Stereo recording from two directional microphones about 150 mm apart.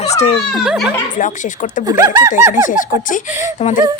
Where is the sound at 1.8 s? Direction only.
25° right (ahead or behind).